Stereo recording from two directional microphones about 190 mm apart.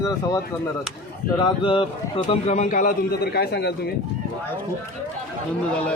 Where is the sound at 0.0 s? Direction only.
15° left (ahead or behind); by 3.7 s 60° left (ahead or behind).